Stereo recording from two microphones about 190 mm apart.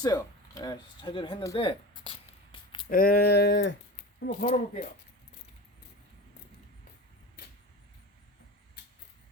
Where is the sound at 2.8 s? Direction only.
50° left (ahead or behind).